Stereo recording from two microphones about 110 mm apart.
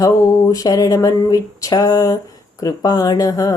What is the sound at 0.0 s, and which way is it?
A woman's voice, 30° left (ahead or behind).